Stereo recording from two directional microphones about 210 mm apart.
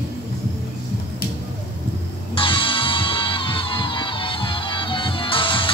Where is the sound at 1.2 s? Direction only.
45° left (ahead or behind).